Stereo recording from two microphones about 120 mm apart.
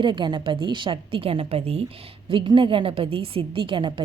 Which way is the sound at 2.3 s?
45° right (ahead or behind).